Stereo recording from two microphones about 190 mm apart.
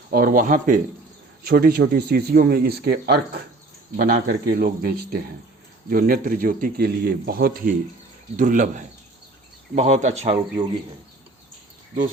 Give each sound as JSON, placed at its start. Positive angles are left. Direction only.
{"t": 0.1, "sound": "a man's voice", "side_deg": -50}